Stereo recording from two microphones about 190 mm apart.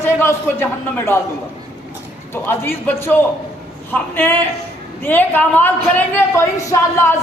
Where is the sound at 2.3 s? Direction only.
10° left (ahead or behind).